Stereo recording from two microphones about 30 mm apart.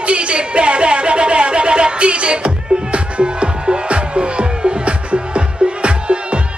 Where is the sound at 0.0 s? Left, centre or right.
Right.